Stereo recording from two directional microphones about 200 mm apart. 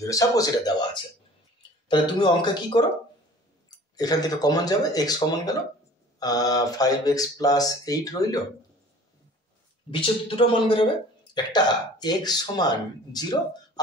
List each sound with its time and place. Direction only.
0.0 s speech: 15° left (ahead or behind)
1.9 s speech: 20° left (ahead or behind)
3.9 s speech: 20° left (ahead or behind)
9.8 s speech: 25° left (ahead or behind)